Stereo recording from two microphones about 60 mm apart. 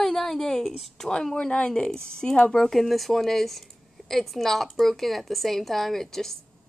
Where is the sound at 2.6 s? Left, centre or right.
Centre.